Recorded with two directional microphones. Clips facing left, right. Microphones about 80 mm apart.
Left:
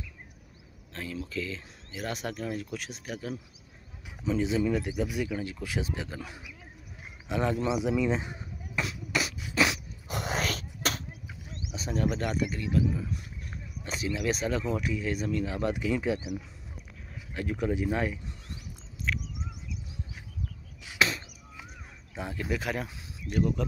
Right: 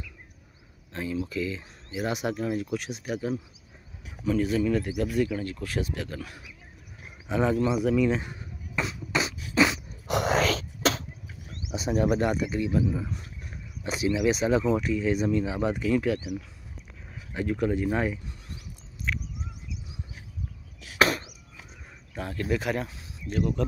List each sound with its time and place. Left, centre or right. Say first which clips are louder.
0.9 s speech: right 5 dB; centre
4.3 s speech: right 2 dB; centre
7.2 s speech: right 4 dB; centre
7.5 s speech: right 4 dB; centre
8.1 s beatboxing: right 2 dB; centre
10.0 s a sound: right 8 dB; right
11.7 s speech: right 6 dB; centre
15.2 s speech: right 4 dB; centre
15.7 s speech: right 5 dB; centre
17.5 s speech: right 3 dB; centre
19.1 s a sound: even; centre
22.1 s speech: right 4 dB; centre
22.6 s speech: right 3 dB; centre